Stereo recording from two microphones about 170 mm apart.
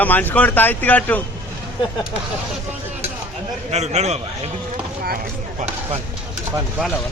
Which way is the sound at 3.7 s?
40° right (ahead or behind).